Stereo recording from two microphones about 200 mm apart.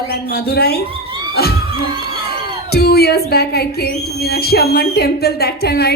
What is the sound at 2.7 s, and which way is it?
A woman's voice, 50° left (ahead or behind).